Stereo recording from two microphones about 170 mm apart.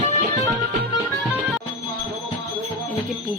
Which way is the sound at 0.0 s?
45° right (ahead or behind).